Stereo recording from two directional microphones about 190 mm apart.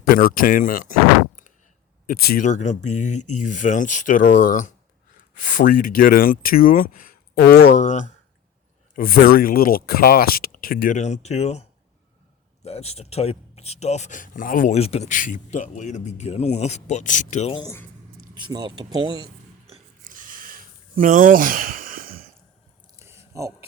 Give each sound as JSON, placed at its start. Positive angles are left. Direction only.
{"t": 0.1, "sound": "speech", "side_deg": 50}
{"t": 2.0, "sound": "speech", "side_deg": 50}
{"t": 9.0, "sound": "speech", "side_deg": 50}
{"t": 12.6, "sound": "speech", "side_deg": 35}
{"t": 18.3, "sound": "speech", "side_deg": -25}
{"t": 20.1, "sound": "a sound", "side_deg": -45}
{"t": 23.0, "sound": "a sound", "side_deg": -15}